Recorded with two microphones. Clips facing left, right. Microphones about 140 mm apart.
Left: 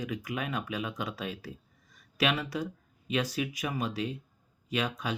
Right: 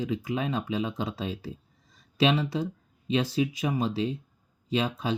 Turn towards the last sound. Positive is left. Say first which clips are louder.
# right 4 dB
turn(degrees=-25)  # may be behind; listen again after turning